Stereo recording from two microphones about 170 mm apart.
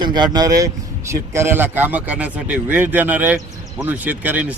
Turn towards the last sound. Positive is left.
turn(degrees=-10)  # may be behind; listen again after turning